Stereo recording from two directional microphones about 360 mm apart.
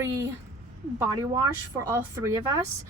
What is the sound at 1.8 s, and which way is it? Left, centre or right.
Speech, centre.